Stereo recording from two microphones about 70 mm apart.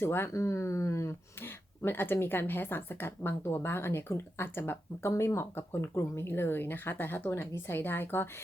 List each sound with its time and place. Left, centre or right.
0.0 s speech: left